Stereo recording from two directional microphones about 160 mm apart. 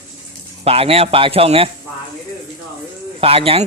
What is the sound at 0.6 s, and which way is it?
Speech, 40° right (ahead or behind).